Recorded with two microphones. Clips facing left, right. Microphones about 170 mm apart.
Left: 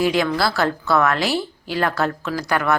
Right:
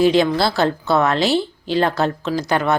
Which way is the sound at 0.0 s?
25° right (ahead or behind).